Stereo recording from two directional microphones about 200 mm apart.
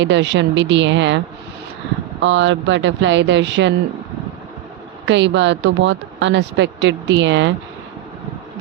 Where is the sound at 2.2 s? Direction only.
65° right (ahead or behind).